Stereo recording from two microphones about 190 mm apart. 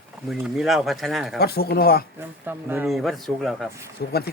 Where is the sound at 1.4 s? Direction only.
55° left (ahead or behind).